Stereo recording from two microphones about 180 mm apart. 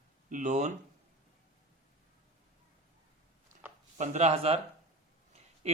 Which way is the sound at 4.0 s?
40° right (ahead or behind).